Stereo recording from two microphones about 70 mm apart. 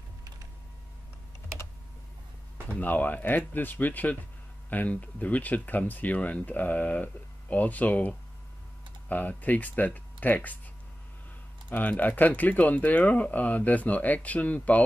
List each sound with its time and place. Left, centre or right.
2.8 s speech: left
11.7 s speech: left